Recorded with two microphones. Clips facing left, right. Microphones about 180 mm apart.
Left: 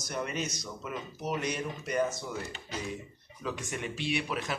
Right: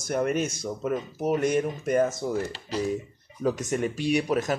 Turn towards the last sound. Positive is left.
turn(degrees=-40)  # may be behind; listen again after turning